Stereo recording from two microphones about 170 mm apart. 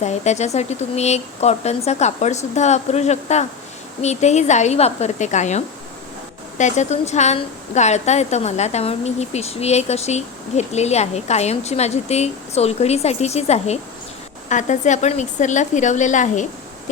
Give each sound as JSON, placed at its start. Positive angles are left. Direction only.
{"t": 0.0, "sound": "a woman's voice", "side_deg": 40}